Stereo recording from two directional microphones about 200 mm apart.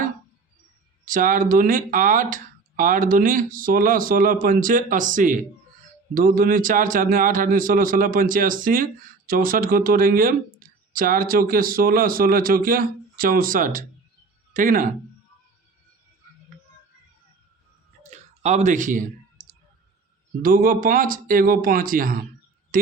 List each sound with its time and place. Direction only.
1.0 s a man's voice: 40° right (ahead or behind)
18.1 s clicking: 35° right (ahead or behind)
20.4 s a man's voice: 45° right (ahead or behind)
22.7 s a sound: 45° right (ahead or behind)